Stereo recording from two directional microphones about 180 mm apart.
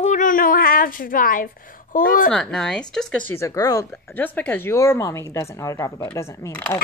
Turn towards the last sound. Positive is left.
turn(degrees=10)  # may be behind; listen again after turning